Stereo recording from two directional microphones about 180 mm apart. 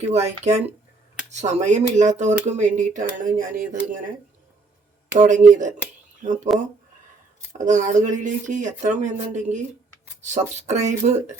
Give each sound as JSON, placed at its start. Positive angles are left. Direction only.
{"t": 0.0, "sound": "speech", "side_deg": -40}
{"t": 5.1, "sound": "speech", "side_deg": -45}
{"t": 7.6, "sound": "speech", "side_deg": -45}